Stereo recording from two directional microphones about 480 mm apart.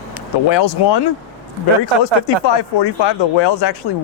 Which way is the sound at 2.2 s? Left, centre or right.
Left.